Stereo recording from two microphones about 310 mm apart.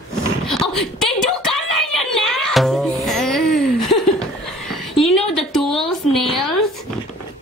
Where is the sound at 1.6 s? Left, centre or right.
Left.